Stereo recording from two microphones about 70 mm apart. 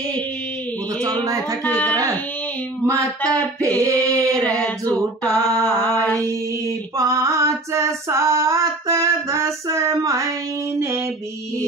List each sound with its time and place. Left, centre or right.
1.0 s female singing: right
1.6 s female singing: left
3.8 s female singing: right
4.4 s female singing: centre
7.0 s female singing: right